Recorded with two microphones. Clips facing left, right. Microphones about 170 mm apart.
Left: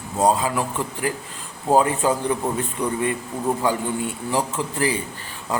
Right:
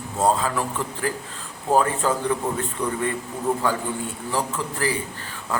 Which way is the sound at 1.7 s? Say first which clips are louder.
Left 2 dB; 15° left (ahead or behind).